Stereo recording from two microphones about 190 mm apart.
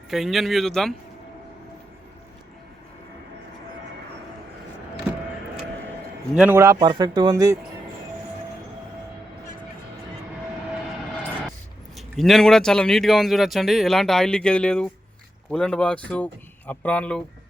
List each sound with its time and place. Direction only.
0.1 s a man's voice: centre (ahead or behind)
6.3 s a man's voice: 10° right (ahead or behind)
11.9 s a man's voice: centre (ahead or behind)